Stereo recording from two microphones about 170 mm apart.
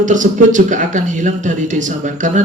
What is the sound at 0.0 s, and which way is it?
Speech, 50° right (ahead or behind).